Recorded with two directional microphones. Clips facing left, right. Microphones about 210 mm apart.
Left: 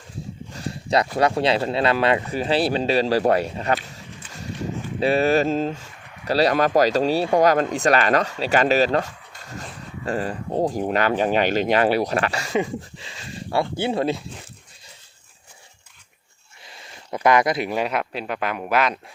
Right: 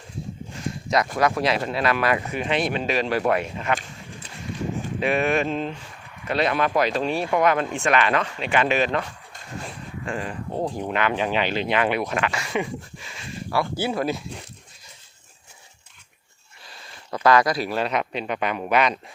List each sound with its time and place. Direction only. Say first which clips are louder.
0.5 s a sound: left 2 dB; 35° left (ahead or behind)
1.1 s speech: left 3 dB; 30° left (ahead or behind)
4.9 s speech: left 4 dB; 35° left (ahead or behind)
10.1 s speech: left 5 dB; 35° left (ahead or behind)
17.1 s speech: even; 20° left (ahead or behind); by 18.9 s centre (ahead or behind)